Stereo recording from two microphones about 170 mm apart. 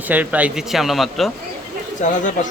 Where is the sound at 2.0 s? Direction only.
50° left (ahead or behind).